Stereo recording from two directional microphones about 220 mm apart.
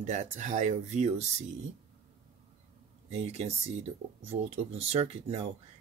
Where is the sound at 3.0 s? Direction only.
30° right (ahead or behind).